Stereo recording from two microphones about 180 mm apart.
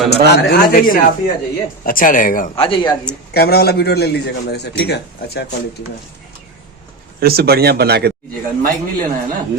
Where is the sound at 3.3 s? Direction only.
65° left (ahead or behind).